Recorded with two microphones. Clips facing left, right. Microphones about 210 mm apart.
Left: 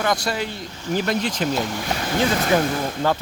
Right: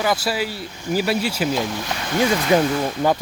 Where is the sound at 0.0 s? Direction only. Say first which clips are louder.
Right 1 dB; 5° right (ahead or behind).